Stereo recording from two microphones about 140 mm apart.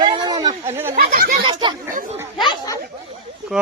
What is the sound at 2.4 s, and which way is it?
Chatter, 30° left (ahead or behind).